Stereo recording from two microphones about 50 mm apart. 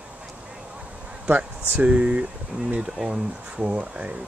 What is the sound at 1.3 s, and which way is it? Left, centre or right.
Speech, right.